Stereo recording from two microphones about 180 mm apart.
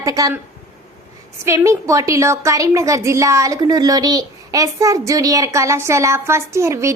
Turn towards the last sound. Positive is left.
turn(degrees=-15)  # may be behind; listen again after turning